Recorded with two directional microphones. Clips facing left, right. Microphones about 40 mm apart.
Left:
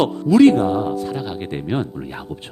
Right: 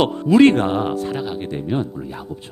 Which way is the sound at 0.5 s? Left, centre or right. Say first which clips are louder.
Left 1 dB; right.